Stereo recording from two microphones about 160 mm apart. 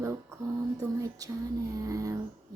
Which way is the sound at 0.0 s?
20° right (ahead or behind).